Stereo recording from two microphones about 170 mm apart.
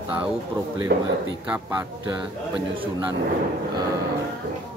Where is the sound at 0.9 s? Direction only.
65° right (ahead or behind).